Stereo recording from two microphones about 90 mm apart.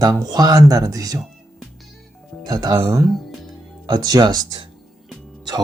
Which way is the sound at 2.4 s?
50° right (ahead or behind).